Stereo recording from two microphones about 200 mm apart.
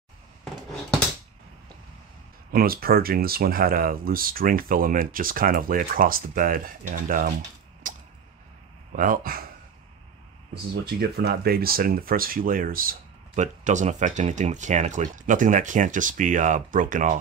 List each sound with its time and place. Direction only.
2.5 s speech: 50° right (ahead or behind)
7.8 s a sound: 40° right (ahead or behind)
8.9 s speech: 40° right (ahead or behind)
10.9 s speech: 50° right (ahead or behind)